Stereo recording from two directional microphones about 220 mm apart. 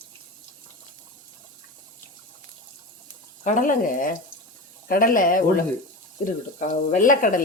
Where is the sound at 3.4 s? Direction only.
35° left (ahead or behind).